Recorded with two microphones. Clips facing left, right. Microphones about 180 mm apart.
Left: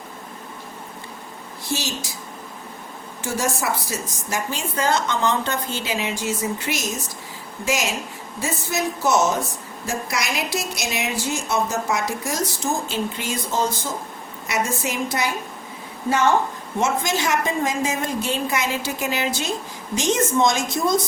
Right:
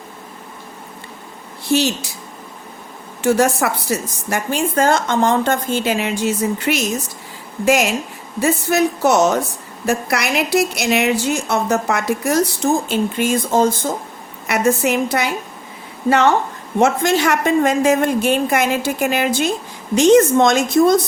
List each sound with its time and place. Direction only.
1.7 s a woman's voice: 65° right (ahead or behind)
3.2 s a woman's voice: 65° right (ahead or behind)
12.9 s a woman's voice: 50° right (ahead or behind)